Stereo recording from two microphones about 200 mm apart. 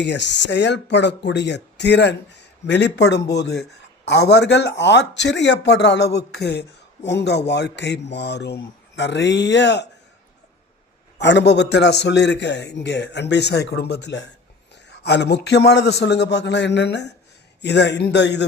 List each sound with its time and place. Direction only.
0.0 s speech: 60° left (ahead or behind)
11.2 s speech: 60° left (ahead or behind)